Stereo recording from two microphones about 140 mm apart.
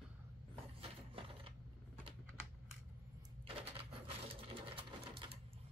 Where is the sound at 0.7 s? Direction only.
40° right (ahead or behind).